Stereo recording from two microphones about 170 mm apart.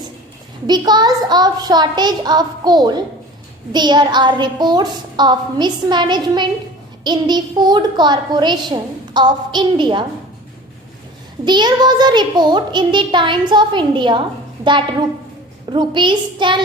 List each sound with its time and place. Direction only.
0.7 s a child's voice: 25° right (ahead or behind)
11.4 s a child's voice: 25° right (ahead or behind)